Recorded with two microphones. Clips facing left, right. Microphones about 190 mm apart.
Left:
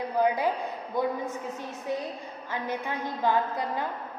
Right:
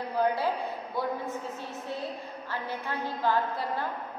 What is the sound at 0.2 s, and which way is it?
Speech, 15° left (ahead or behind).